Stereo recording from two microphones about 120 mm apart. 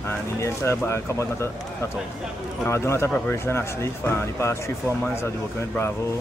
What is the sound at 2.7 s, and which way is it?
Speech, 20° left (ahead or behind).